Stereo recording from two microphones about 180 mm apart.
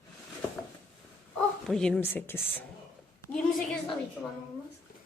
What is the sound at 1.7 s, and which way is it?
Speech, 5° left (ahead or behind).